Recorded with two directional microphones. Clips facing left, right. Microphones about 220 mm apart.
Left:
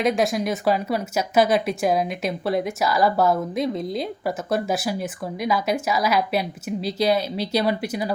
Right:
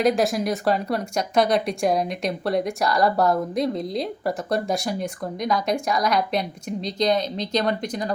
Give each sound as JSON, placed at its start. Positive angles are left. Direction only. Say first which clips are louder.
{"t": 0.0, "sound": "speech", "louder": "right 1 dB", "side_deg": 0}